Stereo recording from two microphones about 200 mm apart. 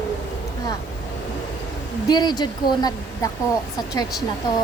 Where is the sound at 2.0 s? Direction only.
20° left (ahead or behind).